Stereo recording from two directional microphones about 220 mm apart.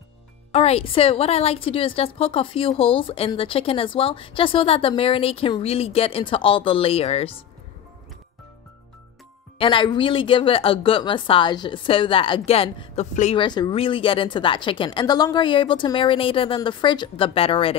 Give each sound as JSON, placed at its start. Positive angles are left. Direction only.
{"t": 0.5, "sound": "a woman's voice", "side_deg": 30}
{"t": 9.6, "sound": "a woman's voice", "side_deg": 20}